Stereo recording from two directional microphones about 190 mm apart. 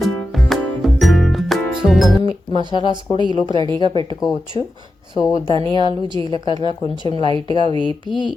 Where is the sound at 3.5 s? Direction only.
25° right (ahead or behind).